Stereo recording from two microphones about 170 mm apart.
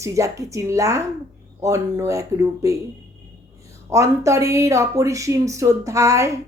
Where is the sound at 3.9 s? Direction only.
20° right (ahead or behind).